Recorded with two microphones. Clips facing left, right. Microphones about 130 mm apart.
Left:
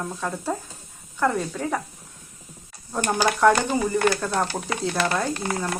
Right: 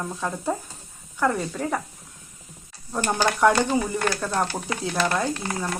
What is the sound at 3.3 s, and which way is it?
Speech, centre (ahead or behind).